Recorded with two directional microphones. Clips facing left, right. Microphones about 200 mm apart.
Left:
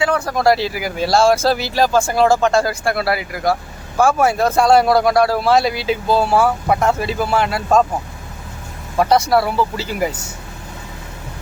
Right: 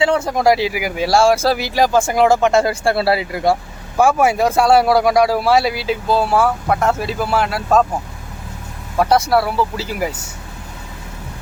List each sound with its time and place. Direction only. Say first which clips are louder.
0.0 s speech: right 2 dB; 25° right (ahead or behind)
0.3 s speech: left 1 dB; 15° right (ahead or behind)
9.0 s speech: even; 5° right (ahead or behind)